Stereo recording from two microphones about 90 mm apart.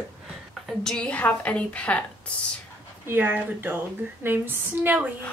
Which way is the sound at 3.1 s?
20° right (ahead or behind).